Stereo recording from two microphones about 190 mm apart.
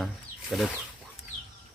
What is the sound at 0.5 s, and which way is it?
Speech, centre (ahead or behind).